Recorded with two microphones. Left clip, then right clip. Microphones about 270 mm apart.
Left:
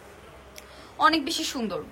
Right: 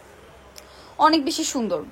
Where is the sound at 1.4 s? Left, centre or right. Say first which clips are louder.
Right 5 dB; centre.